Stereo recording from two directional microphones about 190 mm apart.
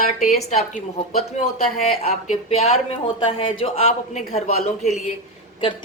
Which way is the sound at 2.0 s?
40° left (ahead or behind).